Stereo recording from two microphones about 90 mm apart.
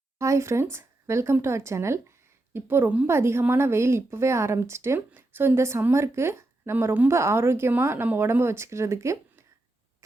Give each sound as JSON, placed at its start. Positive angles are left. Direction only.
{"t": 0.2, "sound": "speech", "side_deg": -35}